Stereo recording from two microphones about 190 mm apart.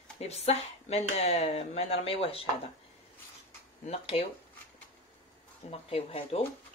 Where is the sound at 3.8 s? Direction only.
35° left (ahead or behind).